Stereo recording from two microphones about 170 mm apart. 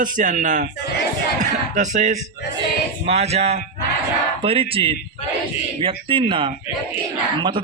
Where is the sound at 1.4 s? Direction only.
45° right (ahead or behind).